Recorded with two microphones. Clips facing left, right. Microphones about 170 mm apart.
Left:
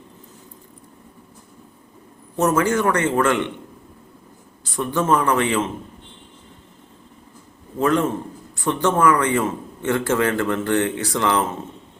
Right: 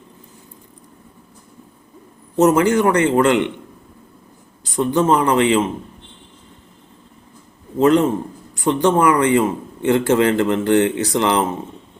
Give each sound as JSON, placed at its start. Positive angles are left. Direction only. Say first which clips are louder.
{"t": 2.3, "sound": "a man's voice", "louder": "right 5 dB", "side_deg": -20}
{"t": 4.6, "sound": "a man's voice", "louder": "right 5 dB", "side_deg": -20}
{"t": 7.8, "sound": "a man's voice", "louder": "right 5 dB", "side_deg": -20}